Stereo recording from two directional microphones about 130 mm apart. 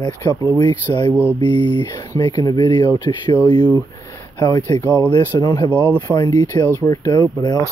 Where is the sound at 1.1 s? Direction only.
15° right (ahead or behind).